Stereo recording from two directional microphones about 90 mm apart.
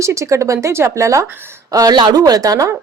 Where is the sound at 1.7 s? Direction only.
45° right (ahead or behind).